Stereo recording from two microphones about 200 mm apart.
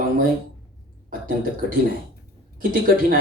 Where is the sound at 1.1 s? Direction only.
45° right (ahead or behind).